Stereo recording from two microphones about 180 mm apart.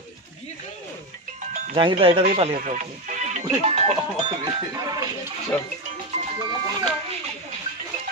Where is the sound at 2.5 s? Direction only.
50° right (ahead or behind); by 5.1 s 20° right (ahead or behind).